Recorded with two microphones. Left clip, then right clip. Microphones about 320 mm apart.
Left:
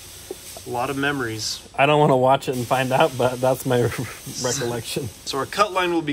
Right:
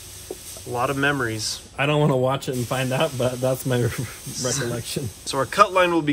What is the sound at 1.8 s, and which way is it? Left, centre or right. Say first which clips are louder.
Speech: left 5 dB; left.